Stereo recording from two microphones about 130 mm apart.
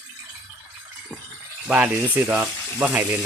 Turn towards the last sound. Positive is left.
turn(degrees=-10)  # may be behind; listen again after turning